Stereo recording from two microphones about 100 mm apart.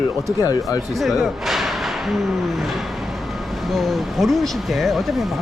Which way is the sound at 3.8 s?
Centre (ahead or behind).